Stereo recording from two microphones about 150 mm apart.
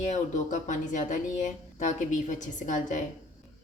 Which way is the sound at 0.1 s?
55° left (ahead or behind).